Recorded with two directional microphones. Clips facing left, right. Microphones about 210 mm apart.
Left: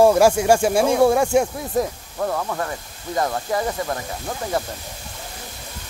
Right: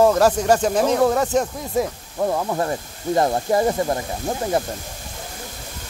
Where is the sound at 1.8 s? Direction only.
15° right (ahead or behind).